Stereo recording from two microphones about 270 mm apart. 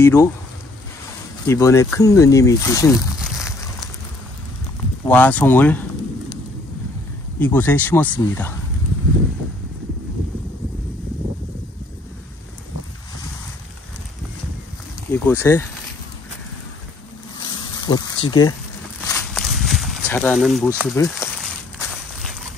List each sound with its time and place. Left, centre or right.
0.0 s speech: centre
1.5 s speech: centre
5.0 s speech: centre
7.3 s speech: centre
15.0 s speech: centre
17.4 s a sound: centre
19.0 s walk: centre
20.9 s speech: centre
21.4 s walk: centre